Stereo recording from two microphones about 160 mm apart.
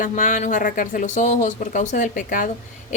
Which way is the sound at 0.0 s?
50° left (ahead or behind).